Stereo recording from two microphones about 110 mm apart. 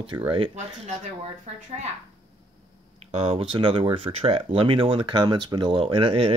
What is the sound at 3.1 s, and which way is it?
Speech, 90° right.